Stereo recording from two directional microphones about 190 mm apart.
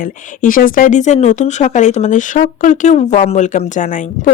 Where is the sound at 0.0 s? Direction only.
45° left (ahead or behind).